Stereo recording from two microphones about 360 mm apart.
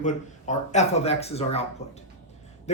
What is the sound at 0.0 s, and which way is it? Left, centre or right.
Speech, centre.